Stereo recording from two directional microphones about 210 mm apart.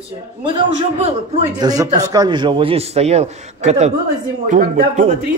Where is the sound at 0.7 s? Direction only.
30° right (ahead or behind).